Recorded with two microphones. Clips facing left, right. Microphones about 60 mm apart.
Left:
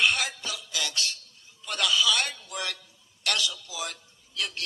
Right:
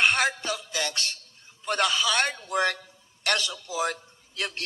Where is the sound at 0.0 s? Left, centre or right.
Right.